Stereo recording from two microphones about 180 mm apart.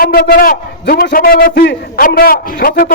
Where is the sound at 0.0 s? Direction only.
60° left (ahead or behind).